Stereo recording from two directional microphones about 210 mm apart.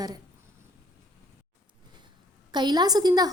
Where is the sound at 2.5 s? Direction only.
20° right (ahead or behind).